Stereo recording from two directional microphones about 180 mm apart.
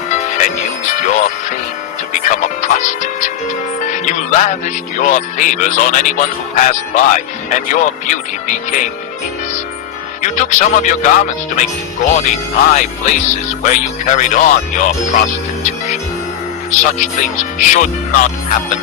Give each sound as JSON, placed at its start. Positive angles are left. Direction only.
{"t": 0.1, "sound": "music", "side_deg": 45}
{"t": 3.8, "sound": "speech", "side_deg": 45}
{"t": 10.2, "sound": "speech", "side_deg": 40}
{"t": 12.7, "sound": "speech", "side_deg": 45}
{"t": 16.7, "sound": "speech", "side_deg": 45}